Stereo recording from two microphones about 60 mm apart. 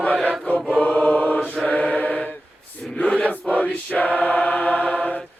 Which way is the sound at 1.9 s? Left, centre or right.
Left.